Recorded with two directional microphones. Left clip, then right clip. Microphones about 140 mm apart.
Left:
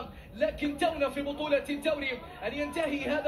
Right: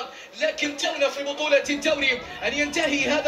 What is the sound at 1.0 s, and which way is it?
Speech, 20° right (ahead or behind).